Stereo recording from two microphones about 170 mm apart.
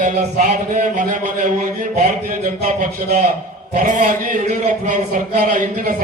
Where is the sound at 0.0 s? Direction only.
45° right (ahead or behind).